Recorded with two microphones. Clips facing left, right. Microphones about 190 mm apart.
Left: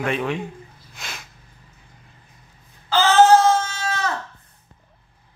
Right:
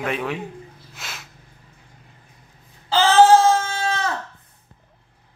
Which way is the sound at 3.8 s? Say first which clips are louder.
Right 1 dB; 25° right (ahead or behind).